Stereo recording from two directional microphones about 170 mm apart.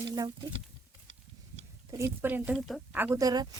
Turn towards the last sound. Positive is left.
turn(degrees=-20)  # may be behind; listen again after turning